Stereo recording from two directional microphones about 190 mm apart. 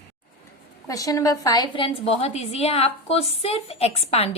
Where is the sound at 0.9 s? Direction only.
20° left (ahead or behind).